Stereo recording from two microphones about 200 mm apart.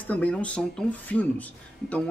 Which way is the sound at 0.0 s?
5° left (ahead or behind).